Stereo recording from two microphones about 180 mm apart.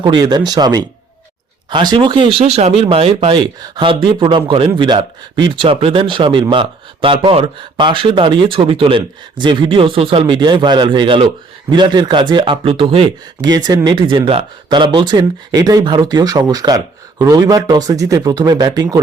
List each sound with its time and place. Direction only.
0.0 s speech: 25° right (ahead or behind)